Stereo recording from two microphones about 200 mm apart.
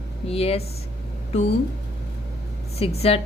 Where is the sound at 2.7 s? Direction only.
30° left (ahead or behind).